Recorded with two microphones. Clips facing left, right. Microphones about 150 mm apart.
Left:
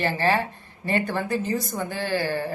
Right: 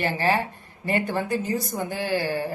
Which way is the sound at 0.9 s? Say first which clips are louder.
Even; 15° right (ahead or behind).